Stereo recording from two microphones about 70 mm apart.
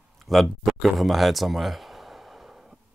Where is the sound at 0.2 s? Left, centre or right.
Centre.